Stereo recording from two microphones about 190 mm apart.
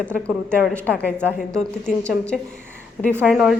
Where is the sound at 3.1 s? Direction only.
10° right (ahead or behind).